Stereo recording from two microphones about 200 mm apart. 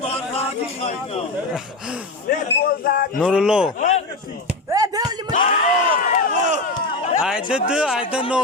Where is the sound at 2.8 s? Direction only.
45° left (ahead or behind).